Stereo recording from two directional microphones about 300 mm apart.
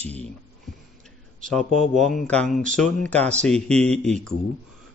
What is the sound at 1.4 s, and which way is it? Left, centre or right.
Speech, centre.